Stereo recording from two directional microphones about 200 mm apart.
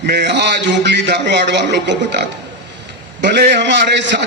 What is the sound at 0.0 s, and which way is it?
A man's voice, 55° right (ahead or behind).